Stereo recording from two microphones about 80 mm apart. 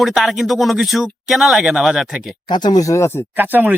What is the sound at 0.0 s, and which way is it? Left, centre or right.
Speech, centre.